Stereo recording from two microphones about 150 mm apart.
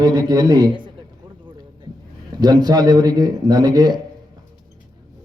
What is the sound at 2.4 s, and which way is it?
A man's voice, 25° right (ahead or behind).